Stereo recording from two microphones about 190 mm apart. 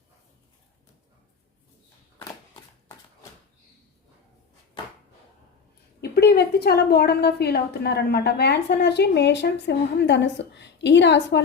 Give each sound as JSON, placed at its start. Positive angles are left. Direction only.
{"t": 6.0, "sound": "a woman's voice", "side_deg": 55}